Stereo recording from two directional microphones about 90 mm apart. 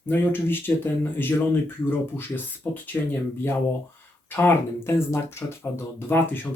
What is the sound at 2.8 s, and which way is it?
Speech, 20° left (ahead or behind).